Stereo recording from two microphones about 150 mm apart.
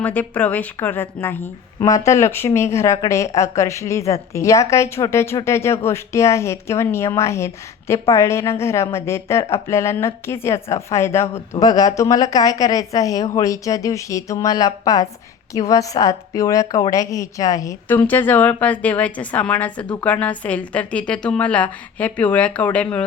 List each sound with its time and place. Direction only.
0.0 s a woman's voice: 10° left (ahead or behind)
19.8 s speech: 30° left (ahead or behind)
20.1 s speech: 10° left (ahead or behind)